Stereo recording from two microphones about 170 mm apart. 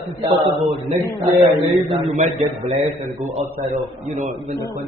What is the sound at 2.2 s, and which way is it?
A man's voice, 45° right (ahead or behind).